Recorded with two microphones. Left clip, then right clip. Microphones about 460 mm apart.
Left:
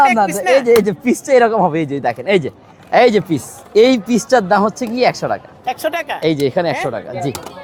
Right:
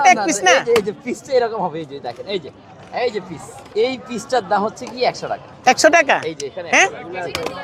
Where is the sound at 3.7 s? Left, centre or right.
Left.